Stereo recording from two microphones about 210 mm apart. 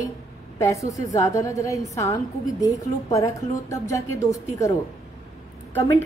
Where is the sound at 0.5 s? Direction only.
15° left (ahead or behind).